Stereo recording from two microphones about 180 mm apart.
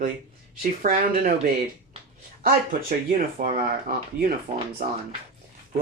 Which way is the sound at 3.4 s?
50° right (ahead or behind).